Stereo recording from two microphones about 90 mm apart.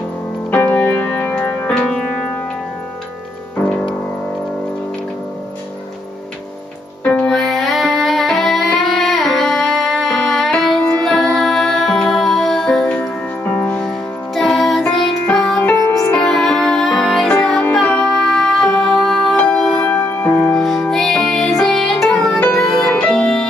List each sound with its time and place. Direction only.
0.5 s music: 20° left (ahead or behind); by 2.0 s 5° left (ahead or behind)
7.1 s music: 15° left (ahead or behind)
7.3 s music: centre (ahead or behind)